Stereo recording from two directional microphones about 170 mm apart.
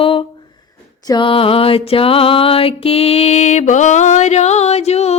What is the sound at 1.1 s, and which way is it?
Mantra, 30° left (ahead or behind).